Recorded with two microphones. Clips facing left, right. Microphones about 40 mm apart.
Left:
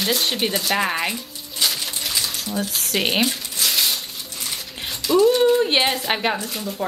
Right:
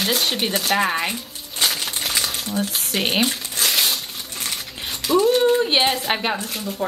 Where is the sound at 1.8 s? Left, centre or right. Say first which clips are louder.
Right 2 dB; right.